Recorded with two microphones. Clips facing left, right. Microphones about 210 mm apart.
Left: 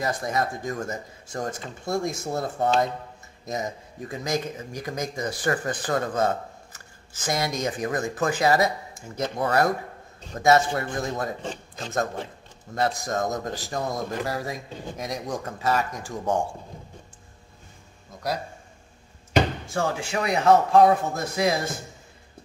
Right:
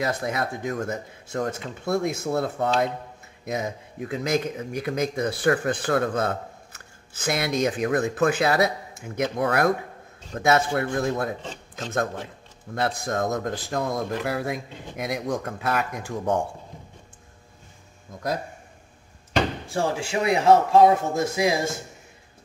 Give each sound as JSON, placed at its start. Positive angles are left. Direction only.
{"t": 0.0, "sound": "speech", "side_deg": -60}
{"t": 10.8, "sound": "speech", "side_deg": -60}
{"t": 19.7, "sound": "a man's voice", "side_deg": -30}